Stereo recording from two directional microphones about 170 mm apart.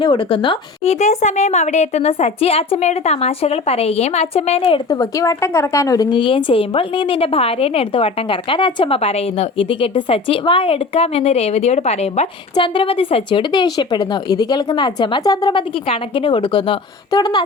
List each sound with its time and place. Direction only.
0.0 s speech: 30° left (ahead or behind)
0.9 s a woman's voice: 45° left (ahead or behind)
4.9 s a woman's voice: 20° left (ahead or behind)